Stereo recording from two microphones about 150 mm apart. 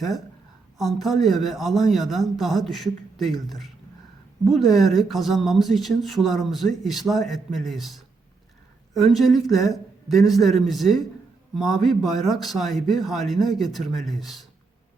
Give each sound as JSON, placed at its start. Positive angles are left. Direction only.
{"t": 0.8, "sound": "speech", "side_deg": 0}
{"t": 4.4, "sound": "speech", "side_deg": 0}